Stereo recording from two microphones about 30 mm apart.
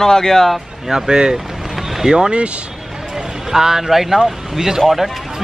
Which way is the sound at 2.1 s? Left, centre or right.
Right.